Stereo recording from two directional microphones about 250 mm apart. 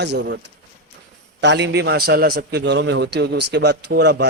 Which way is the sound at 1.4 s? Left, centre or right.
Right.